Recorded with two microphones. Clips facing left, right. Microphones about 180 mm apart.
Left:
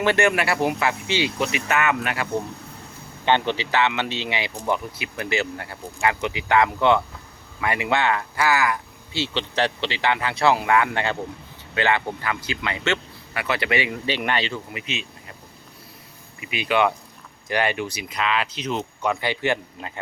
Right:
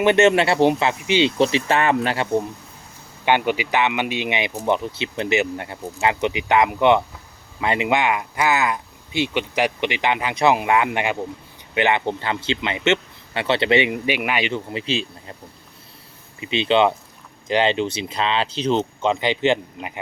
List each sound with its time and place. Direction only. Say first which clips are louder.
0.0 s a man's voice: right 5 dB; 20° right (ahead or behind)
3.2 s a man's voice: right 2 dB; 10° right (ahead or behind)
14.7 s a man's voice: right 7 dB; 30° right (ahead or behind)
16.4 s a man's voice: right 4 dB; 25° right (ahead or behind)